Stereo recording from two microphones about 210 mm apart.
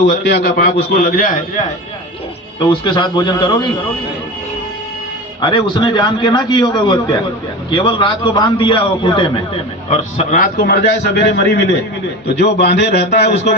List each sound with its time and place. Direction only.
0.0 s a man's voice: 50° left (ahead or behind)
2.6 s a man's voice: 20° left (ahead or behind)
5.4 s a man's voice: 20° left (ahead or behind); by 13.2 s 50° left (ahead or behind)